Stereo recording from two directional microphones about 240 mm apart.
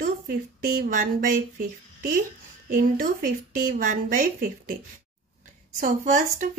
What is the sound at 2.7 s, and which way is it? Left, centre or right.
A woman's voice, right.